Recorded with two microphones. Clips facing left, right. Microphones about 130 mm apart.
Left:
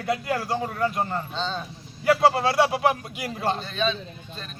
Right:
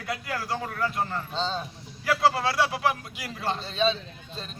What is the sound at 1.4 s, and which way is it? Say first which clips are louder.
Speech: right 3 dB; 35° right (ahead or behind).